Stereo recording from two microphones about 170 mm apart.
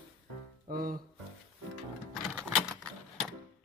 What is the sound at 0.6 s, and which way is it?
Music, 60° right (ahead or behind).